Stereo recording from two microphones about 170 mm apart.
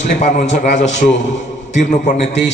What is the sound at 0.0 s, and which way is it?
A man's voice, 50° left (ahead or behind).